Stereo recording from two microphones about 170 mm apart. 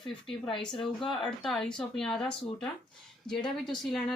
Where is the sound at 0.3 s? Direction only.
30° left (ahead or behind).